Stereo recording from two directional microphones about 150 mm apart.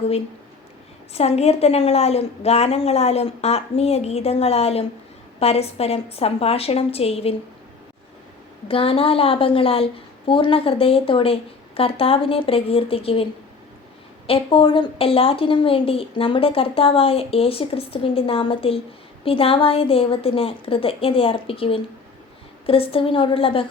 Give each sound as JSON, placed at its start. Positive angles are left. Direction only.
{"t": 1.1, "sound": "a woman's voice", "side_deg": 45}
{"t": 8.6, "sound": "a woman's voice", "side_deg": 40}
{"t": 14.3, "sound": "a woman's voice", "side_deg": 35}